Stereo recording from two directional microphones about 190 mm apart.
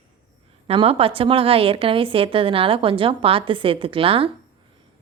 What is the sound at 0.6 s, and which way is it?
A woman's voice, 30° right (ahead or behind).